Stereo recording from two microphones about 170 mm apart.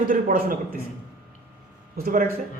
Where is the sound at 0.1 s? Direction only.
55° right (ahead or behind).